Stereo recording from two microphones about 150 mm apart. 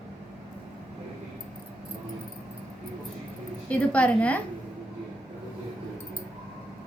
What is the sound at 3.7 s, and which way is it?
Speech, 10° left (ahead or behind).